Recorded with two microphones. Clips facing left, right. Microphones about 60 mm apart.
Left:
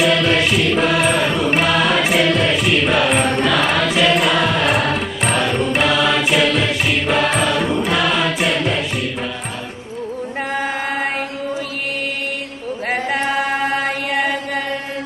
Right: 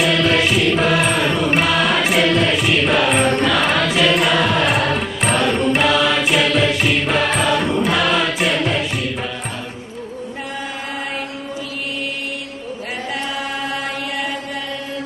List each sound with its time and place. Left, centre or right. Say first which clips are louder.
0.0 s music: left 1 dB; centre
12.9 s chant: left 6 dB; left